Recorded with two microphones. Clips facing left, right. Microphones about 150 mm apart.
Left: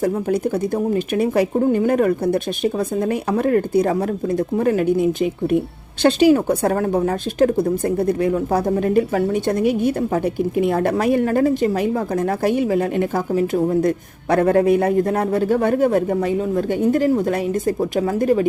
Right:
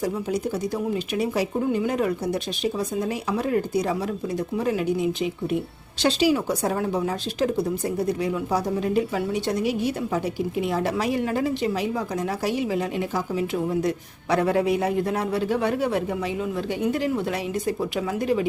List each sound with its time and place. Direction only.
0.0 s a woman's voice: 55° left (ahead or behind)